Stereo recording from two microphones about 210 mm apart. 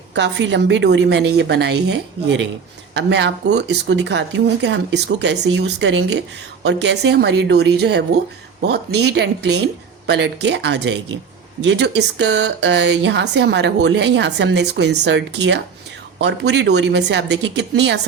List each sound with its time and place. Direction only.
0.1 s speech: 55° right (ahead or behind)